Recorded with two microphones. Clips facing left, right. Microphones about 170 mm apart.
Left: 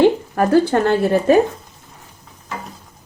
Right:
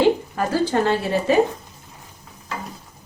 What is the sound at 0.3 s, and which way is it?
A woman's voice, 60° left (ahead or behind).